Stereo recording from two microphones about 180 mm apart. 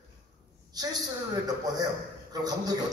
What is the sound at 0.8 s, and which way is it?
Speech, 20° right (ahead or behind).